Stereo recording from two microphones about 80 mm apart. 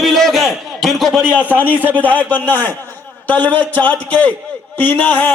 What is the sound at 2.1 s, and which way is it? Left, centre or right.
A man's voice, left.